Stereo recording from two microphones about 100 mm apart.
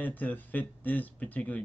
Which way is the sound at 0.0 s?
15° left (ahead or behind).